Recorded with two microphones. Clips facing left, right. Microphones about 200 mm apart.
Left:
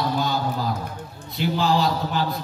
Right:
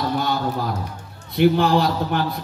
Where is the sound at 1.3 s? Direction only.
60° right (ahead or behind).